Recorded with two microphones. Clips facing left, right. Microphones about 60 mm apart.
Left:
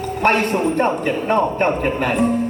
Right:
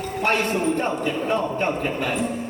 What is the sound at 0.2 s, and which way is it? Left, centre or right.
A man's voice, left.